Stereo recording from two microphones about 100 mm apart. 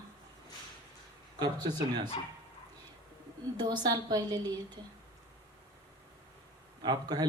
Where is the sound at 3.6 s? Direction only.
45° right (ahead or behind).